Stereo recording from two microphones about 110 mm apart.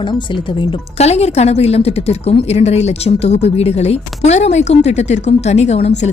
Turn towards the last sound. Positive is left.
turn(degrees=80)